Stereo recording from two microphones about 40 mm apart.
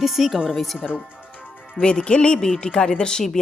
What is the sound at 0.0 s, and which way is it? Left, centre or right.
Speech, centre.